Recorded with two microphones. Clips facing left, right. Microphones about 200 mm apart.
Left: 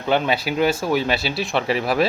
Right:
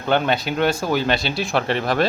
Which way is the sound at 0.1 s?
5° left (ahead or behind).